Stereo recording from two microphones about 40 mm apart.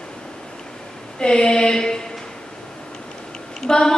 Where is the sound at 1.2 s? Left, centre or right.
Left.